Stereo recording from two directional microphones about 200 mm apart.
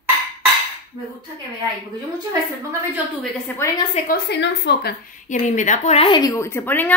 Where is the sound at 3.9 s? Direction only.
45° left (ahead or behind).